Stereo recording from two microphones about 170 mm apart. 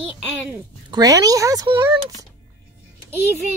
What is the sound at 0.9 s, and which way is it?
Speech, 20° right (ahead or behind).